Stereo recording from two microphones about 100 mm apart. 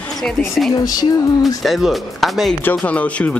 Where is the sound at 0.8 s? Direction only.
40° left (ahead or behind).